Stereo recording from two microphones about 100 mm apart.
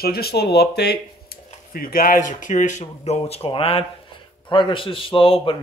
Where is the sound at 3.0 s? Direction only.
90° left; by 3.9 s 75° left (ahead or behind).